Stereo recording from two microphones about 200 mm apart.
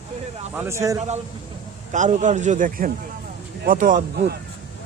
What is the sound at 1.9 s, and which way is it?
A man's voice, 35° right (ahead or behind).